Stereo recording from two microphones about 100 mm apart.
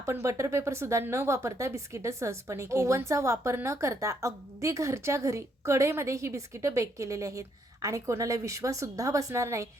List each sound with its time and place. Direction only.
0.0 s speech: 30° right (ahead or behind)